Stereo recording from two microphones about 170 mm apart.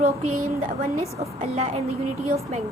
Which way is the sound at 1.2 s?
40° right (ahead or behind).